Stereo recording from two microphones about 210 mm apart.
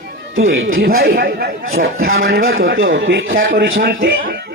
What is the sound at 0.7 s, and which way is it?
Speech, 45° right (ahead or behind).